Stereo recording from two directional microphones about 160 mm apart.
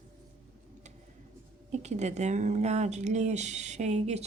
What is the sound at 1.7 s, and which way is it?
A woman's voice, 45° right (ahead or behind).